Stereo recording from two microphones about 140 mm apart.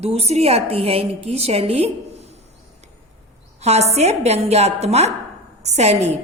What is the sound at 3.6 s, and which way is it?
A woman's voice, 50° right (ahead or behind).